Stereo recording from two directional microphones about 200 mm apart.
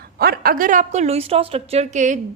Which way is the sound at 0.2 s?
50° right (ahead or behind).